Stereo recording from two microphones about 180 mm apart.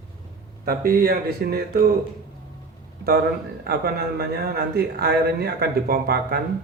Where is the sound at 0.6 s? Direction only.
55° right (ahead or behind).